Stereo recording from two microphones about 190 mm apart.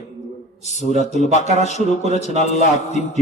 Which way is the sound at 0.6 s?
40° left (ahead or behind).